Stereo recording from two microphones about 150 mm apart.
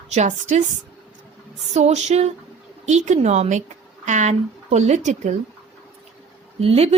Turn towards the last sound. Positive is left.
turn(degrees=-40)  # may be behind; listen again after turning